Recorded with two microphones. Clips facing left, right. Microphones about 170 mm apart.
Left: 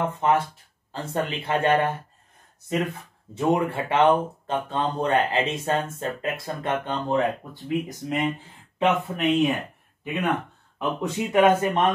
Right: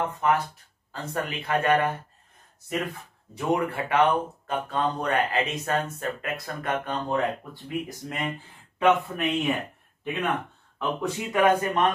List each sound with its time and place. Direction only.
0.2 s speech: 25° left (ahead or behind)
10.8 s speech: 15° left (ahead or behind)